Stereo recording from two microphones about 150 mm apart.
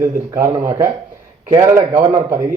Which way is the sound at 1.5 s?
20° right (ahead or behind).